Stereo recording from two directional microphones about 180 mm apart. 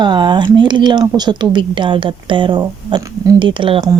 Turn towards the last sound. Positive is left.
turn(degrees=-30)  # may be behind; listen again after turning